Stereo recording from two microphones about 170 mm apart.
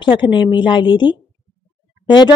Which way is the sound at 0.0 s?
30° left (ahead or behind).